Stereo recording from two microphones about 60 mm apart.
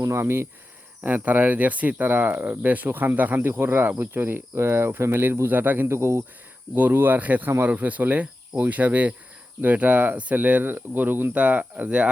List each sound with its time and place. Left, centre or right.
0.0 s speech: right
1.0 s speech: right
5.9 s speech: right
6.7 s speech: right